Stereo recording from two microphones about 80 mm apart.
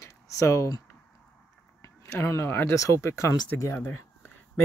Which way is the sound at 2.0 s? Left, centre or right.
Left.